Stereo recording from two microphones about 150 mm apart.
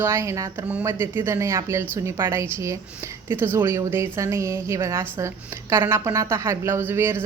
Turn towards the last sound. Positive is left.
turn(degrees=-15)  # may be behind; listen again after turning